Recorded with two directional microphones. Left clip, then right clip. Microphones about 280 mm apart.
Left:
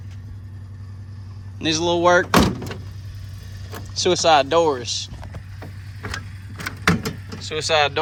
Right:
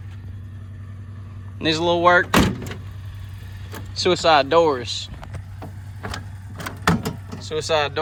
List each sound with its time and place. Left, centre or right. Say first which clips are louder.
1.5 s speech: right 1 dB; centre
4.0 s speech: even; centre
6.7 s door: left 1 dB; centre
7.3 s speech: left 2 dB; centre